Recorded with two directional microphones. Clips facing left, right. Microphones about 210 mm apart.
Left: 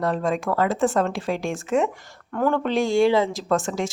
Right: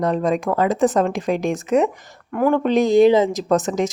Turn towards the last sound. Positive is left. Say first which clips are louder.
# right 5 dB
turn(degrees=-20)  # may be behind; listen again after turning